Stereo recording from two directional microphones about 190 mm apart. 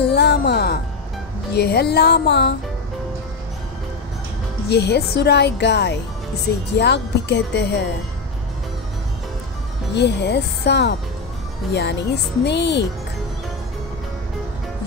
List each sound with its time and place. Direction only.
0.1 s music: 60° left (ahead or behind)
1.5 s a woman's voice: 60° left (ahead or behind)
4.6 s a woman's voice: 60° left (ahead or behind)
9.9 s a woman's voice: 60° left (ahead or behind)